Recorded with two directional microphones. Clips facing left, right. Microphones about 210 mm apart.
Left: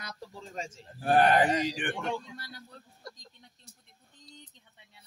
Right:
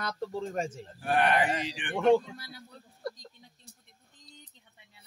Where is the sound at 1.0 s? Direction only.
35° left (ahead or behind).